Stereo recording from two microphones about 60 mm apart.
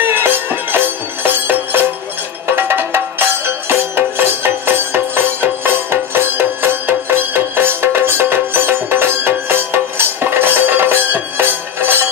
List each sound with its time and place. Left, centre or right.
0.0 s music: right